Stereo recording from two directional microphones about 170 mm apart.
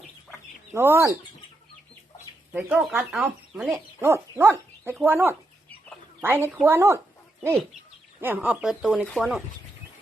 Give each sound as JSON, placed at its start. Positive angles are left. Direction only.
{"t": 0.7, "sound": "speech", "side_deg": -15}
{"t": 2.5, "sound": "speech", "side_deg": -10}
{"t": 8.2, "sound": "speech", "side_deg": -10}